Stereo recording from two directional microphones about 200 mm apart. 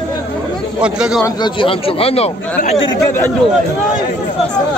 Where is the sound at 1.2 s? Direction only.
20° left (ahead or behind).